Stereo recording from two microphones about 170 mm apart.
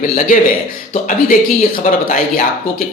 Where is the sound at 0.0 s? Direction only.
50° left (ahead or behind).